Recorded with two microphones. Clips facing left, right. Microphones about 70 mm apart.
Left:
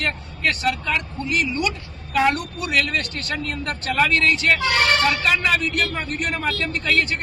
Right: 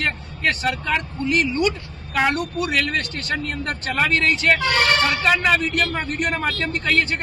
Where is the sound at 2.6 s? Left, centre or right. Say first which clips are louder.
Left 3 dB; right.